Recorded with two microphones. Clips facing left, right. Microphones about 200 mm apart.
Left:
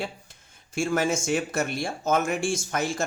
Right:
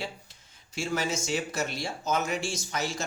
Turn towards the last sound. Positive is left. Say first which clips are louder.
# left 5 dB
turn(degrees=50)  # may be behind; listen again after turning